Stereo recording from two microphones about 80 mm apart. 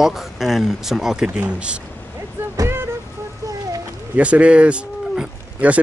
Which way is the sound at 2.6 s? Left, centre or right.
Right.